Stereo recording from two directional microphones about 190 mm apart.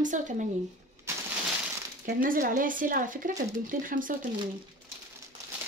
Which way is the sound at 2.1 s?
45° right (ahead or behind).